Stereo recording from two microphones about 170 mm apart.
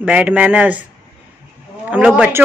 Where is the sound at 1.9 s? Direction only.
10° right (ahead or behind).